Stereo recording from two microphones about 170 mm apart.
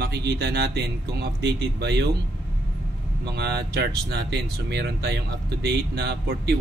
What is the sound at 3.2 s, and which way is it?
Speech, 75° right (ahead or behind).